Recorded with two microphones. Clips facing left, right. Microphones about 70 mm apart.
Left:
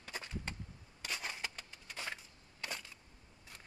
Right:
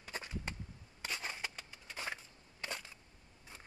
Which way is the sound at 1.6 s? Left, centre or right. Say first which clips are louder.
Right 1 dB; centre.